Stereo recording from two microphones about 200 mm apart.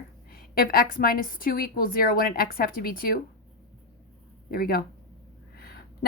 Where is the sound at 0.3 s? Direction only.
45° left (ahead or behind).